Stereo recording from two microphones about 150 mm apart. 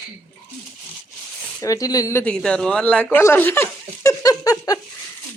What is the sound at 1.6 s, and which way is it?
Speech, 25° left (ahead or behind).